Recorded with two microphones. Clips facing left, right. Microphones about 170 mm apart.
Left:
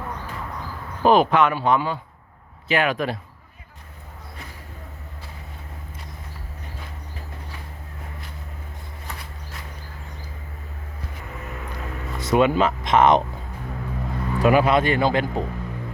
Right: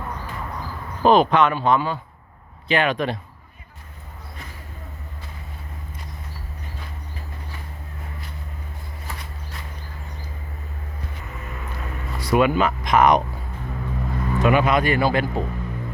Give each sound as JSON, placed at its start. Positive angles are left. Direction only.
{"t": 1.0, "sound": "speech", "side_deg": 10}
{"t": 11.7, "sound": "a sound", "side_deg": 20}
{"t": 14.3, "sound": "speech", "side_deg": 35}